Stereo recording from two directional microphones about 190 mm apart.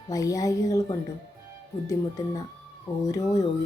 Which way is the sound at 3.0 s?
15° left (ahead or behind).